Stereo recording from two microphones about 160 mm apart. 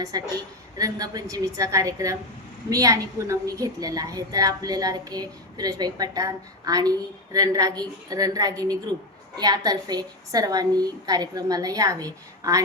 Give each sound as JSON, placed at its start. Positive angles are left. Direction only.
{"t": 0.1, "sound": "a woman's voice", "side_deg": -25}